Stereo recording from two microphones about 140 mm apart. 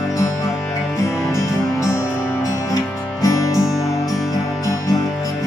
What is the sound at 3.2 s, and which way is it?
Music, 20° left (ahead or behind).